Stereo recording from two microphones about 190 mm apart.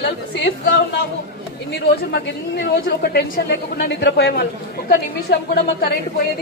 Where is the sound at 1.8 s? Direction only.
60° left (ahead or behind).